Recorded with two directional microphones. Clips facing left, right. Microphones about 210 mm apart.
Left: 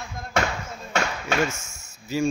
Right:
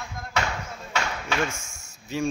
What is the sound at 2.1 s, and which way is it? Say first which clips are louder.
Speech: left 3 dB; centre (ahead or behind).